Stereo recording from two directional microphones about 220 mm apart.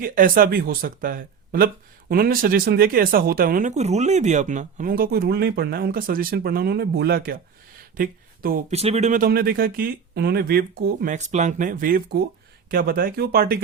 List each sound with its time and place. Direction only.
0.0 s speech: 40° right (ahead or behind)
8.7 s speech: 30° right (ahead or behind)